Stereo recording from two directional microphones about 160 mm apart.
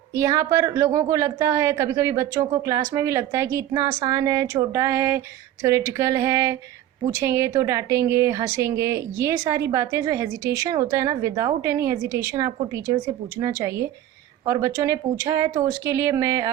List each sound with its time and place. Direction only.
0.2 s a woman's voice: 20° right (ahead or behind)